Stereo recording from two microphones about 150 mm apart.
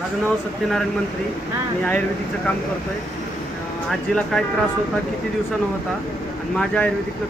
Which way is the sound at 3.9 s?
Centre (ahead or behind).